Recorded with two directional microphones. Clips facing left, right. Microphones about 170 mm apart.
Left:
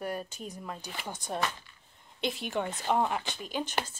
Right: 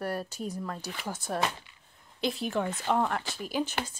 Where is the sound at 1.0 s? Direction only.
5° right (ahead or behind).